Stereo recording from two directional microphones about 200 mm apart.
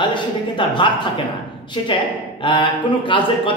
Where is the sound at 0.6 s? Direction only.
25° left (ahead or behind).